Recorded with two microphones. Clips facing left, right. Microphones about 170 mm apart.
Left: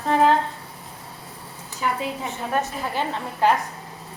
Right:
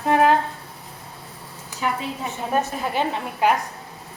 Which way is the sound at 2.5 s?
15° right (ahead or behind).